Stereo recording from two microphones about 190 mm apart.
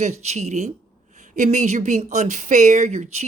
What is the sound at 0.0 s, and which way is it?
Speech, 35° right (ahead or behind).